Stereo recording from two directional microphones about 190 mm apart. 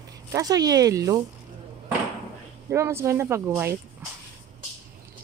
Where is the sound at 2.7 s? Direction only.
15° right (ahead or behind).